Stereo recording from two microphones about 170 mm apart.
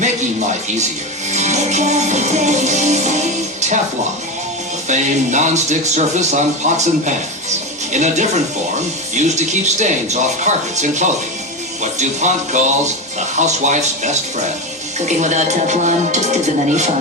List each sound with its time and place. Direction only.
1.3 s speech: 45° right (ahead or behind)
4.9 s speech: 45° right (ahead or behind)